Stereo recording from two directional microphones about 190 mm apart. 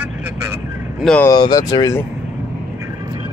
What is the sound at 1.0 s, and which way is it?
Speech, 5° left (ahead or behind).